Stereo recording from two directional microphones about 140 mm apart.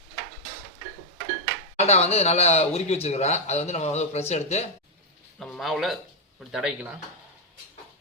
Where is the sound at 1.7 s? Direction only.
50° left (ahead or behind).